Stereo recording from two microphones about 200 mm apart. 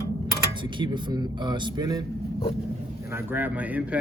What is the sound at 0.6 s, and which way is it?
Speech, 25° right (ahead or behind).